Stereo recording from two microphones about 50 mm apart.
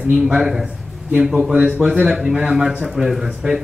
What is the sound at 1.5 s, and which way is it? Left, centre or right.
Speech, right.